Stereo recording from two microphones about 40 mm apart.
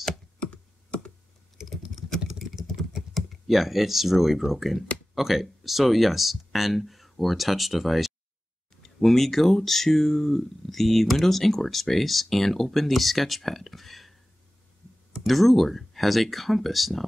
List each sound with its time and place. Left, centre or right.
0.4 s computer keyboard: left
1.6 s typing: centre
2.9 s computer keyboard: centre
4.5 s speech: centre
15.1 s speech: centre